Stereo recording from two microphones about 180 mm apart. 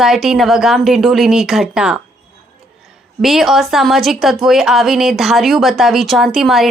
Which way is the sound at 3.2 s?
Centre (ahead or behind).